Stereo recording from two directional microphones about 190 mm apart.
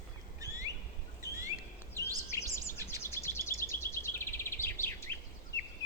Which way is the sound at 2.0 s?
20° right (ahead or behind).